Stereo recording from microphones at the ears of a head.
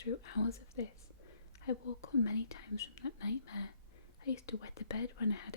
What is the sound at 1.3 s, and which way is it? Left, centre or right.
Speech, left.